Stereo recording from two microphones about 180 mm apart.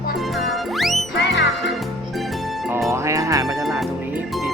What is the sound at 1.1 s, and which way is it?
Music, 80° left.